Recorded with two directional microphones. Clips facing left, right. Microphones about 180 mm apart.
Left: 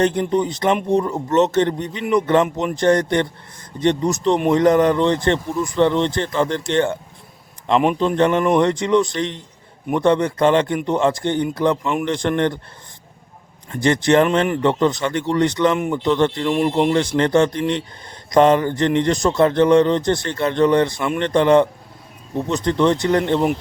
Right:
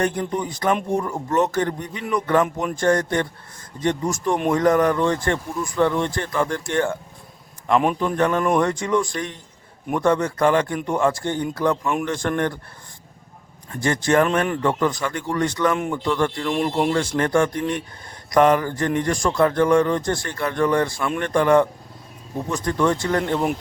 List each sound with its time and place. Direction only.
0.0 s speech: 20° left (ahead or behind)
13.8 s speech: 20° left (ahead or behind)
16.5 s speech: 10° left (ahead or behind)
16.9 s speech: 20° left (ahead or behind)